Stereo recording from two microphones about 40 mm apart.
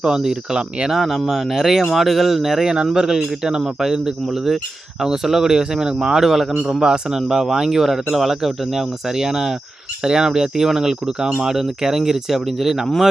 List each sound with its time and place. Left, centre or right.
0.0 s speech: centre
6.7 s speech: centre